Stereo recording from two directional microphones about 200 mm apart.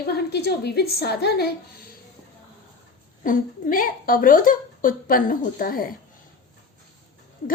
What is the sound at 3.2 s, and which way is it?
A woman's voice, 45° left (ahead or behind).